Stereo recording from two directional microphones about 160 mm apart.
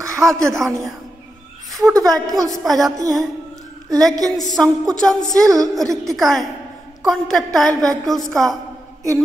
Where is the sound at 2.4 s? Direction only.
Centre (ahead or behind).